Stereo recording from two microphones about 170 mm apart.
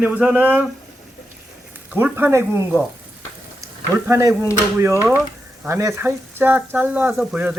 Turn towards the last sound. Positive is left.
turn(degrees=-5)  # may be behind; listen again after turning